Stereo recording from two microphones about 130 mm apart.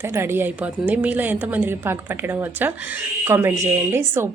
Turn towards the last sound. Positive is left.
turn(degrees=-20)  # may be behind; listen again after turning